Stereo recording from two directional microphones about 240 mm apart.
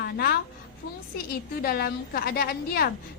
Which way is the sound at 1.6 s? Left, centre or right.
Left.